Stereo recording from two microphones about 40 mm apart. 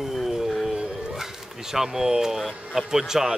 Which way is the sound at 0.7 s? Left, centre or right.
Centre.